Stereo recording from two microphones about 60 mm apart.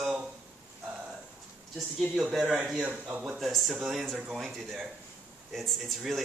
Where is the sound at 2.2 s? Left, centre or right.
Centre.